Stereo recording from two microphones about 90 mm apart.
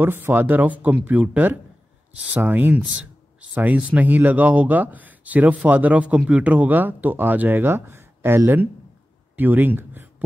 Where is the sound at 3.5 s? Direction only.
15° right (ahead or behind).